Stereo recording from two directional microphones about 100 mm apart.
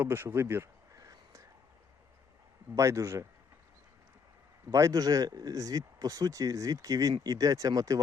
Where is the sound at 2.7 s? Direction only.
30° right (ahead or behind).